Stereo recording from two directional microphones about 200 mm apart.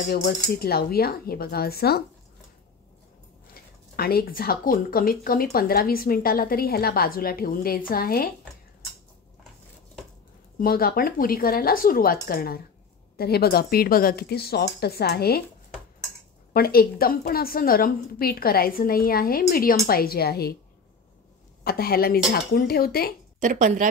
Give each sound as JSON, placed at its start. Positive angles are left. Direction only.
{"t": 0.1, "sound": "speech", "side_deg": 50}
{"t": 3.5, "sound": "speech", "side_deg": 50}
{"t": 10.6, "sound": "speech", "side_deg": 45}
{"t": 16.5, "sound": "speech", "side_deg": 50}
{"t": 21.6, "sound": "speech", "side_deg": 50}
{"t": 23.4, "sound": "speech", "side_deg": -40}